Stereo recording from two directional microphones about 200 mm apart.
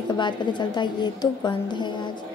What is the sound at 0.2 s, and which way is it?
A woman's voice, 20° left (ahead or behind).